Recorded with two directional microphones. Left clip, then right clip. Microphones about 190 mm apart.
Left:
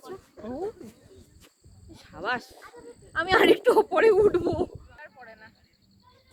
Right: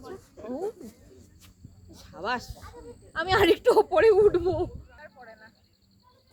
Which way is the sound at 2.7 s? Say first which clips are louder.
Left 3 dB; 30° left (ahead or behind).